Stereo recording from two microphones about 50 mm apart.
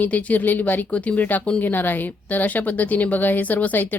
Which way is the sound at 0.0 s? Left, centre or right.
Left.